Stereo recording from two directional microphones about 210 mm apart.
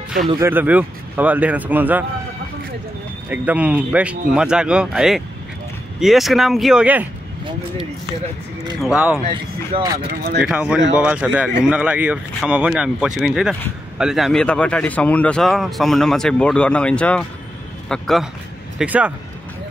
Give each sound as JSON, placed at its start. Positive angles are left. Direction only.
{"t": 0.4, "sound": "speech", "side_deg": -10}
{"t": 3.3, "sound": "speech", "side_deg": -5}
{"t": 8.8, "sound": "speech", "side_deg": -5}
{"t": 9.3, "sound": "speech", "side_deg": -25}
{"t": 9.9, "sound": "speech", "side_deg": -50}
{"t": 10.4, "sound": "speech", "side_deg": -5}